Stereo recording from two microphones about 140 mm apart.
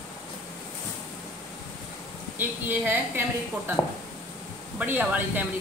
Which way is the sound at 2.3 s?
15° right (ahead or behind).